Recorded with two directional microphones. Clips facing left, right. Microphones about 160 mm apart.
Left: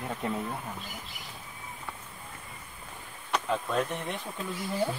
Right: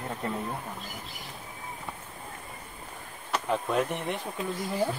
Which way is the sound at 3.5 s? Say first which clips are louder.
Right 3 dB; 20° right (ahead or behind).